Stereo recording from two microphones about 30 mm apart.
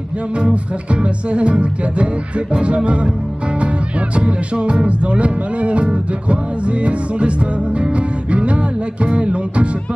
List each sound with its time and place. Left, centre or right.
0.4 s music: right